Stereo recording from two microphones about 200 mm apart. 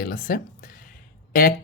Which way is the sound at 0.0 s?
45° left (ahead or behind).